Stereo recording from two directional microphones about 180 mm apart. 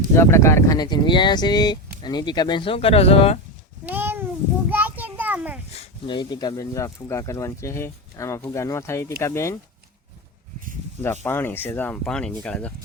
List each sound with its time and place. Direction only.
0.2 s speech: 15° left (ahead or behind); by 3.4 s 35° left (ahead or behind)
3.8 s a sound: 10° right (ahead or behind)
4.7 s child singing: 10° right (ahead or behind)
5.7 s speech: 30° left (ahead or behind)
11.0 s speech: 10° left (ahead or behind)